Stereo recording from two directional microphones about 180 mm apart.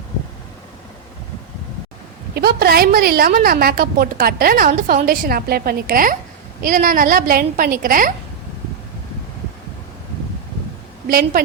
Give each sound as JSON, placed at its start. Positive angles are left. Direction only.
{"t": 2.3, "sound": "a woman's voice", "side_deg": -60}
{"t": 11.0, "sound": "a woman's voice", "side_deg": -55}